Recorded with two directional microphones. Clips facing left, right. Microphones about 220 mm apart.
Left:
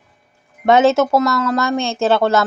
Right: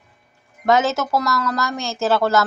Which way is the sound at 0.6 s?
25° left (ahead or behind).